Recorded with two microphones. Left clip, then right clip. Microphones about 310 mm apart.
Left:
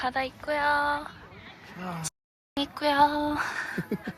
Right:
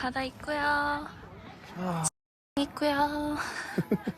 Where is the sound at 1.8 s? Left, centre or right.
Right.